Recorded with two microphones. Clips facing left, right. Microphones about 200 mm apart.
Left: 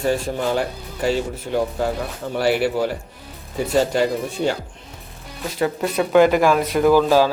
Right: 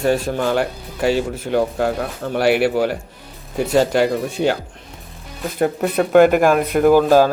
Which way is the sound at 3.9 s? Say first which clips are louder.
Right 3 dB; 60° right (ahead or behind).